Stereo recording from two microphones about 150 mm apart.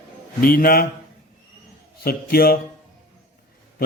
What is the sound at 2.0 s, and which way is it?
Speech, 90° left.